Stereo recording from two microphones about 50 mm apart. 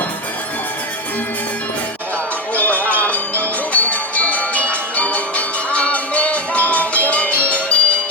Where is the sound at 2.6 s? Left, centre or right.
Left.